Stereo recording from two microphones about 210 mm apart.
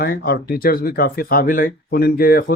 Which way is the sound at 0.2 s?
50° left (ahead or behind).